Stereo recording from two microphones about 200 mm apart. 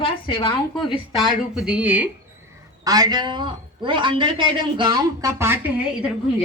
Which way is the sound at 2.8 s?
20° right (ahead or behind).